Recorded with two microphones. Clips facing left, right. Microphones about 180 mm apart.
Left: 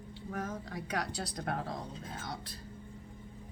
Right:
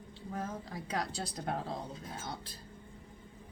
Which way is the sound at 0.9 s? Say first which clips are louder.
Even; 30° right (ahead or behind).